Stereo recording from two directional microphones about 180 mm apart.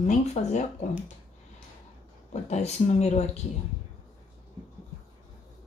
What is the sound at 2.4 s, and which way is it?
Speech, 40° left (ahead or behind).